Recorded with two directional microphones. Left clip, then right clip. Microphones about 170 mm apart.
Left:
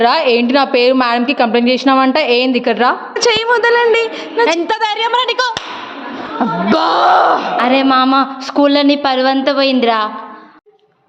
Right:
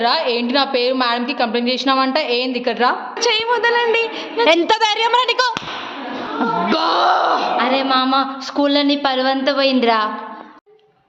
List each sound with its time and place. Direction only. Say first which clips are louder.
0.0 s a woman's voice: left 6 dB; 50° left (ahead or behind)
4.6 s a woman's voice: even; 5° right (ahead or behind)
6.4 s speech: left 4 dB; 40° left (ahead or behind); by 10.1 s 20° left (ahead or behind)